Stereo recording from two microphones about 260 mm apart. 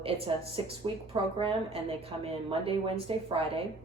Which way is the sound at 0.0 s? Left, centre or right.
Right.